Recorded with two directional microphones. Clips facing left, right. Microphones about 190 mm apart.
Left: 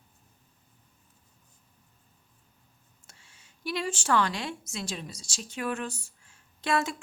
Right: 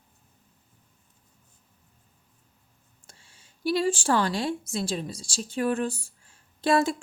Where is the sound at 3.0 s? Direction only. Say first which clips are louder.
Right 3 dB; 30° right (ahead or behind).